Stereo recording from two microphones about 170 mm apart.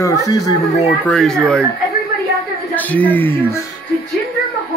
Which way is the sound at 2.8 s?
10° left (ahead or behind).